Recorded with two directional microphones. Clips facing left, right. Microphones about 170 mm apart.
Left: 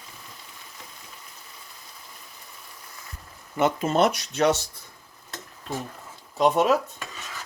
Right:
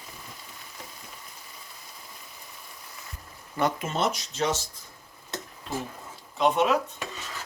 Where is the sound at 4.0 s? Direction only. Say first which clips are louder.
Left 7 dB; 65° left (ahead or behind).